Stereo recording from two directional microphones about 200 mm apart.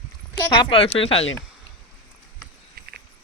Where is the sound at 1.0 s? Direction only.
30° left (ahead or behind).